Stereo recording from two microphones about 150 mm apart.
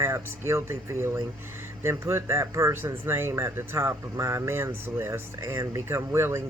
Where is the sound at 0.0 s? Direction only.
15° right (ahead or behind).